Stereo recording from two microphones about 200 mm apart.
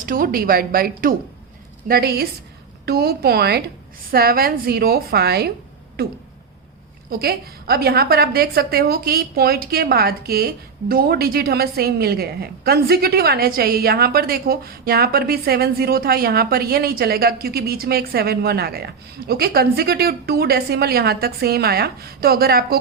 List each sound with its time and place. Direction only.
0.0 s a woman's voice: 45° right (ahead or behind)